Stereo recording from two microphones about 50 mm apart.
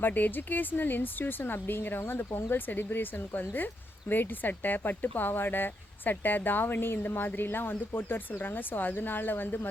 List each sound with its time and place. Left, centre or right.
0.0 s speech: left